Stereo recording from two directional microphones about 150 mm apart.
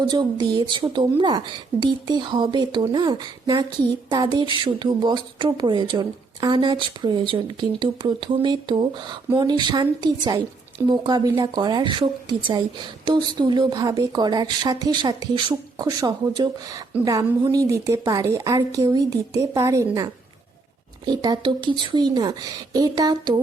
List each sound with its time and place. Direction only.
0.0 s speech: 30° right (ahead or behind)